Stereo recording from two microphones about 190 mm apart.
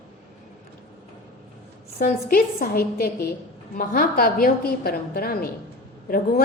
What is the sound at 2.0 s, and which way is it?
A woman's voice, 50° left (ahead or behind).